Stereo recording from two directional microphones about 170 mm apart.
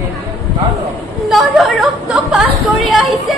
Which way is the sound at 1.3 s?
Centre (ahead or behind).